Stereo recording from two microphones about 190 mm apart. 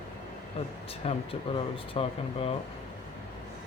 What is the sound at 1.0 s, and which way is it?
Speech, 30° left (ahead or behind).